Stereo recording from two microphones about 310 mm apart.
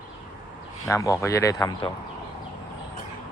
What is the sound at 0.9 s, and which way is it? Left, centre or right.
Speech, centre.